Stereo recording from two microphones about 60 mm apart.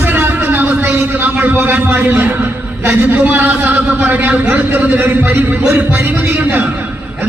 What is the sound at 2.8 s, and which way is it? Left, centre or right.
A man's voice, right.